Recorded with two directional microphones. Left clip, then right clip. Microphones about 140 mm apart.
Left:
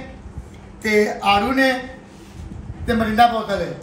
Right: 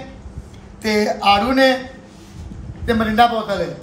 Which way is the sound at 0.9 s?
50° right (ahead or behind).